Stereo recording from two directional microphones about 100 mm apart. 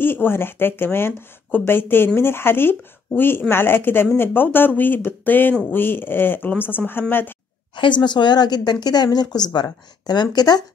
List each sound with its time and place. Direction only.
0.0 s speech: 20° left (ahead or behind)
7.7 s a woman's voice: 50° left (ahead or behind)